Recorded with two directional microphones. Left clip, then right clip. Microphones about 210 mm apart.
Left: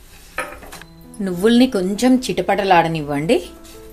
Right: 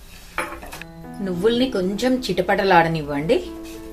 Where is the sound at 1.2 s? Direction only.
45° left (ahead or behind).